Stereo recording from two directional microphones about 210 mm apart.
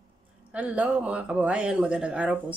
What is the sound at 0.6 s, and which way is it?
Speech, 5° right (ahead or behind).